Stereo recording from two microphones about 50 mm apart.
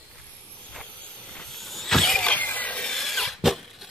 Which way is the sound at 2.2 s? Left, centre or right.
Left.